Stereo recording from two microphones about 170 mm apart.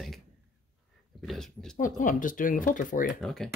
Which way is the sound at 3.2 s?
Centre (ahead or behind).